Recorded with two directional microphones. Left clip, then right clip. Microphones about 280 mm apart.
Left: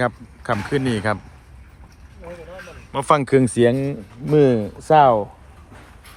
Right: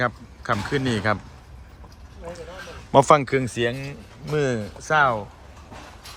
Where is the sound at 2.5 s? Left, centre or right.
Centre.